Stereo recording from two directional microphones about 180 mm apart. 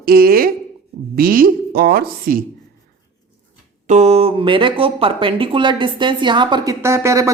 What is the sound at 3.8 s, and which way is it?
A woman's voice, 40° right (ahead or behind).